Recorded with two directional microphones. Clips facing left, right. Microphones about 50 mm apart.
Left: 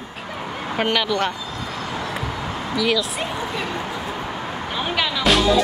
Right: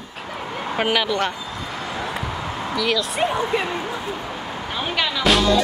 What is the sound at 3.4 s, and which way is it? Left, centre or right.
Speech, right.